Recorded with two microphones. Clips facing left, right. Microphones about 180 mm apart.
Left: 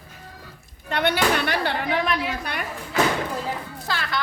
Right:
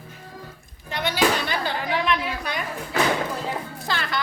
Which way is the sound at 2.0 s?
50° left (ahead or behind).